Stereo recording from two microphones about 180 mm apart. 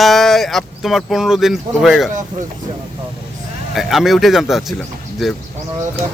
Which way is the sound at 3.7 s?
Centre (ahead or behind).